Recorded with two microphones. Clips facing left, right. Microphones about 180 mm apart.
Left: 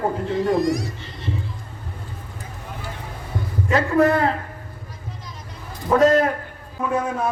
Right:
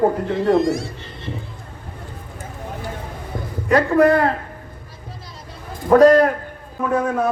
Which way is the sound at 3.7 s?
45° right (ahead or behind).